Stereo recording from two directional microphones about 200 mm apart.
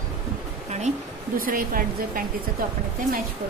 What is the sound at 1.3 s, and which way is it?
Speech, 45° right (ahead or behind).